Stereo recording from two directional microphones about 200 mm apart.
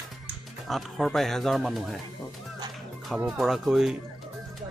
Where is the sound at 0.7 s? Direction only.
Centre (ahead or behind).